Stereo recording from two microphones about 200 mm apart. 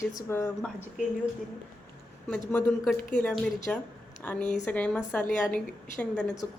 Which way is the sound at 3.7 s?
5° left (ahead or behind).